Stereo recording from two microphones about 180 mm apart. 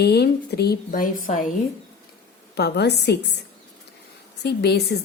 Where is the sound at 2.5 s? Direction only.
65° left (ahead or behind).